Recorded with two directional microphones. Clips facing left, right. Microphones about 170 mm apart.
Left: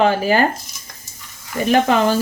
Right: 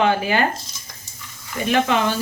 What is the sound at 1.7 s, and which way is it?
Speech, 40° left (ahead or behind).